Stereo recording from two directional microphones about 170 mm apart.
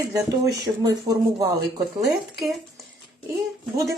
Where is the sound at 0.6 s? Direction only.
20° right (ahead or behind).